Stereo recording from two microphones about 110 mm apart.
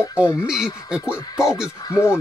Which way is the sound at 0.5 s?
5° right (ahead or behind).